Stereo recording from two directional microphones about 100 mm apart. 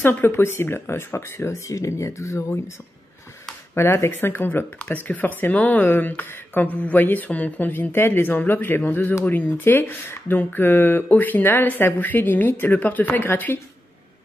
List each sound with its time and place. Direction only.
0.0 s speech: 20° left (ahead or behind)
3.7 s speech: 25° left (ahead or behind)